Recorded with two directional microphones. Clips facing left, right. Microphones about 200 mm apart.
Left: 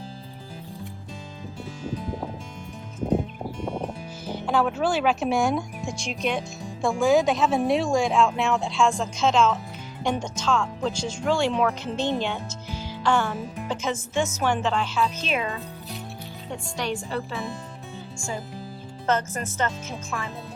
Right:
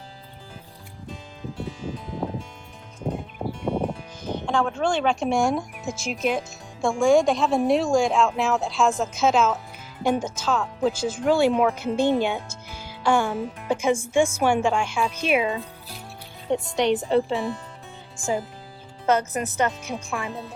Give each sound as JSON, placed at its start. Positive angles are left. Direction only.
{"t": 3.7, "sound": "a woman's voice", "side_deg": 5}
{"t": 16.5, "sound": "speech", "side_deg": -20}
{"t": 19.0, "sound": "speech", "side_deg": -10}